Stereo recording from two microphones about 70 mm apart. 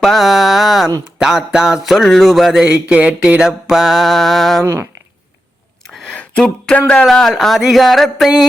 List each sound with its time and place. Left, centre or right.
0.0 s a sound: centre
1.5 s speech: centre
2.9 s speech: centre
3.4 s speech: centre
4.6 s speech: right
5.9 s a sound: centre
7.0 s speech: centre